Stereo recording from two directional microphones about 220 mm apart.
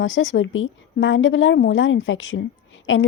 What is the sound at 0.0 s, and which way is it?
A woman's voice, 60° left (ahead or behind).